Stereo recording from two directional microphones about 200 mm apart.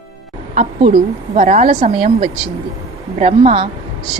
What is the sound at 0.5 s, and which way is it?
A woman's voice, 35° right (ahead or behind).